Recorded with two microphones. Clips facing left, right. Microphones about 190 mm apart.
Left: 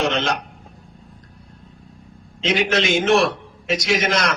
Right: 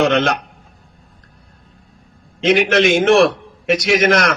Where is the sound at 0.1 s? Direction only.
60° right (ahead or behind).